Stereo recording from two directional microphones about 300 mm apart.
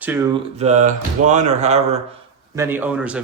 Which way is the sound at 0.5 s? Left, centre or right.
Right.